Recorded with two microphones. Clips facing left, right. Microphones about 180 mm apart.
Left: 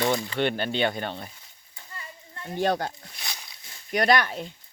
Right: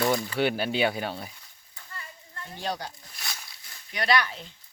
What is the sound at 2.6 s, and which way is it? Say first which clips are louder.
Speech: left 8 dB; 55° left (ahead or behind).